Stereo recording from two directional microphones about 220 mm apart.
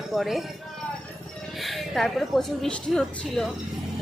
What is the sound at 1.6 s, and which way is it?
A woman's voice, centre (ahead or behind).